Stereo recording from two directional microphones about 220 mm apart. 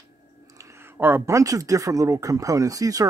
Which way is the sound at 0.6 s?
10° right (ahead or behind).